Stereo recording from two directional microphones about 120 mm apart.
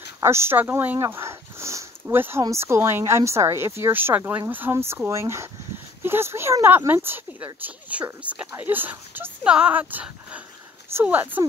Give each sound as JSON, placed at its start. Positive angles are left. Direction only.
{"t": 0.2, "sound": "speech", "side_deg": -20}